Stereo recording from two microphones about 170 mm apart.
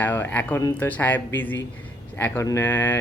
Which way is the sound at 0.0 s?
10° left (ahead or behind).